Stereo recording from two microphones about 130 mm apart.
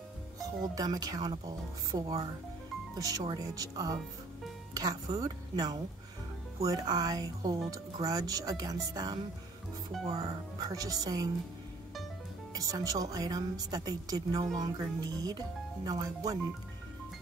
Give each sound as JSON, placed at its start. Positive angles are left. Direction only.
{"t": 0.4, "sound": "a woman's voice", "side_deg": -30}
{"t": 12.5, "sound": "a woman's voice", "side_deg": -25}